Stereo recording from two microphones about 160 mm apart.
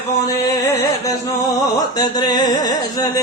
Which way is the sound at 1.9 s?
25° left (ahead or behind).